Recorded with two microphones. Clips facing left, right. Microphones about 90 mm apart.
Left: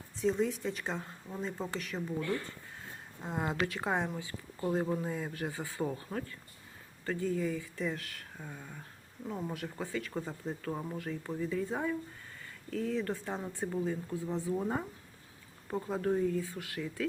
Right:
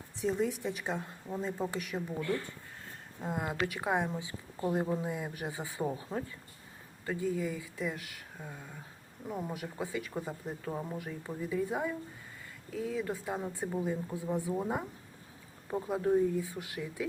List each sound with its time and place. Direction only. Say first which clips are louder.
0.2 s speech: left 1 dB; 10° right (ahead or behind)
3.2 s speech: even; 5° right (ahead or behind)